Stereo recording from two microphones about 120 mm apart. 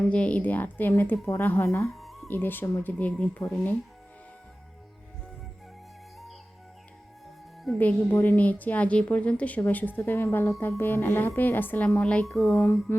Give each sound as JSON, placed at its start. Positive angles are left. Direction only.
{"t": 0.0, "sound": "a woman's voice", "side_deg": 10}
{"t": 1.9, "sound": "music", "side_deg": 0}
{"t": 2.2, "sound": "a woman's voice", "side_deg": 15}
{"t": 7.8, "sound": "a woman's voice", "side_deg": 15}
{"t": 12.9, "sound": "a woman's voice", "side_deg": 20}